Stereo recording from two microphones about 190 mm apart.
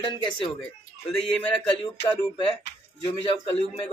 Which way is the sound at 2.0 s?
25° left (ahead or behind).